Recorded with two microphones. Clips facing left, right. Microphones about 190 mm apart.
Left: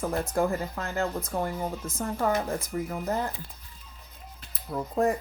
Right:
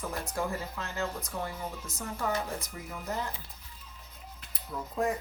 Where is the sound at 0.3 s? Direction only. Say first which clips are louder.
Left 6 dB; 50° left (ahead or behind).